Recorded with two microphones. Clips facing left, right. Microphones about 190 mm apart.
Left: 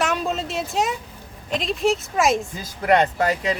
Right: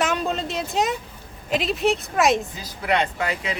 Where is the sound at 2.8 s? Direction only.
45° left (ahead or behind).